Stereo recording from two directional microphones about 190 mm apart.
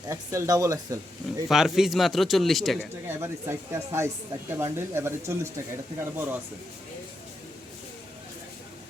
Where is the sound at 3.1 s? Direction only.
15° right (ahead or behind).